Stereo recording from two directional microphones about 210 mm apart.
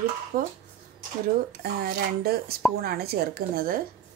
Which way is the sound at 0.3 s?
40° right (ahead or behind).